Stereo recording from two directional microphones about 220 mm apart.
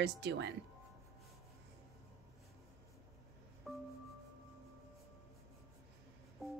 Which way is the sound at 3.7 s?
Centre (ahead or behind).